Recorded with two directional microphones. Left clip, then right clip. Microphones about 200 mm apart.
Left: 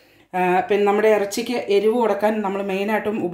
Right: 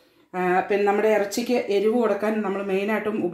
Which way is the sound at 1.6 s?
25° left (ahead or behind).